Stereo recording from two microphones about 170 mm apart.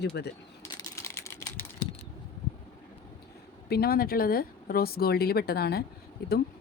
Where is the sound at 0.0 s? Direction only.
80° left.